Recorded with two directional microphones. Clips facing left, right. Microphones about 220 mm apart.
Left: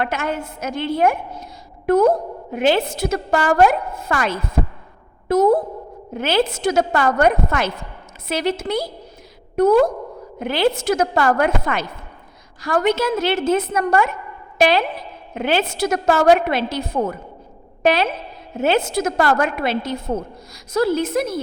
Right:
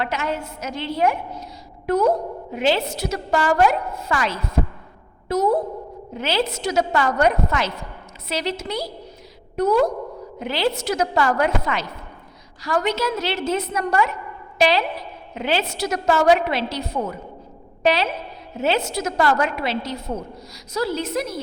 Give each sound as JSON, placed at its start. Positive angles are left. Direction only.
{"t": 0.0, "sound": "a woman's voice", "side_deg": 50}